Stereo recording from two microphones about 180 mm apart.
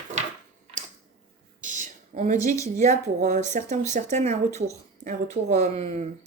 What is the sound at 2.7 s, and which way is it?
A woman's voice, 40° right (ahead or behind).